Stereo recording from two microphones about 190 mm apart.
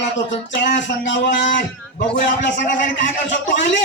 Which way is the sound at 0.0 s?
70° left (ahead or behind).